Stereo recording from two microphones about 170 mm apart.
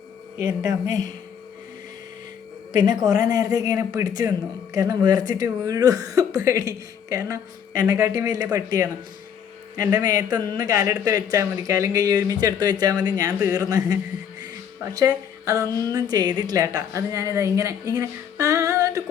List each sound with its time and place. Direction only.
0.3 s a woman's voice: 20° right (ahead or behind)
3.0 s a woman's voice: 20° right (ahead or behind)